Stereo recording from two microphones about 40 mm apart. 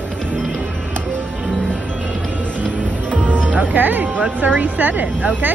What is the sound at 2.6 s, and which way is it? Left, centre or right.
Music, left.